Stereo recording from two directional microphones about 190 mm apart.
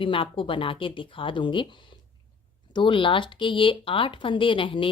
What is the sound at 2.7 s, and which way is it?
Speech, 25° left (ahead or behind).